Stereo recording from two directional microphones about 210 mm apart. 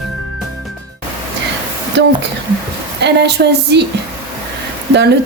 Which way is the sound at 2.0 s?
55° right (ahead or behind).